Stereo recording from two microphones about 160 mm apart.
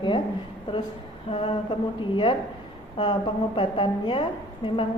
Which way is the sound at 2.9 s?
30° left (ahead or behind).